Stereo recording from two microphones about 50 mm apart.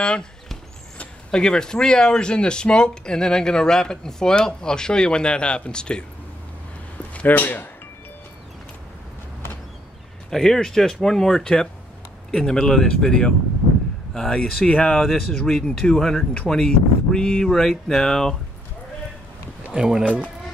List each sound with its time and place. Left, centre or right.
0.0 s speech: centre
1.3 s speech: centre
7.2 s speech: left
10.3 s speech: centre
15.0 s speech: centre
19.7 s speech: centre